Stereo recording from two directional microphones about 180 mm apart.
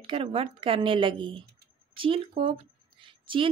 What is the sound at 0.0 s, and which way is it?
A woman's voice, 30° right (ahead or behind).